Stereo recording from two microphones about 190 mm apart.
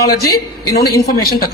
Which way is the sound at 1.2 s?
55° left (ahead or behind).